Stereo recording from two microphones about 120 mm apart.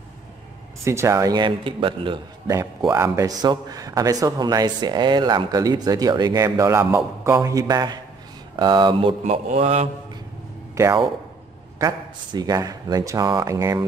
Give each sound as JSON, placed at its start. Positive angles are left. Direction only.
{"t": 0.8, "sound": "a man's voice", "side_deg": -25}
{"t": 2.4, "sound": "a man's voice", "side_deg": -25}
{"t": 9.2, "sound": "a man's voice", "side_deg": -65}
{"t": 10.7, "sound": "a sound", "side_deg": -25}
{"t": 11.8, "sound": "a man's voice", "side_deg": -35}